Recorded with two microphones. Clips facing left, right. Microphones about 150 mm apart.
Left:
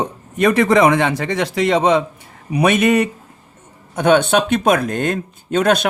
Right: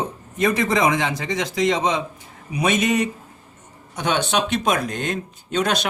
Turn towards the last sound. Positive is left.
turn(degrees=55)  # may be behind; listen again after turning